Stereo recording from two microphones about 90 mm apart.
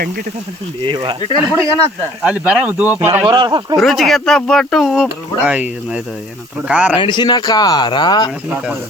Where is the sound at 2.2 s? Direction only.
10° right (ahead or behind).